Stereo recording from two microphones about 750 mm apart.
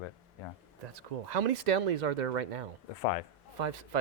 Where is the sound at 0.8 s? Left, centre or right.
Right.